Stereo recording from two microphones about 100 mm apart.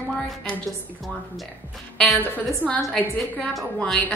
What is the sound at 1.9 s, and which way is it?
A woman's voice, centre (ahead or behind).